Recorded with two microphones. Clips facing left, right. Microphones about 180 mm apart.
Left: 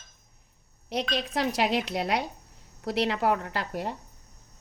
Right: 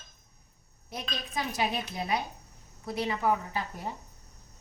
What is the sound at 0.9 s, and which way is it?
Speech, 80° left.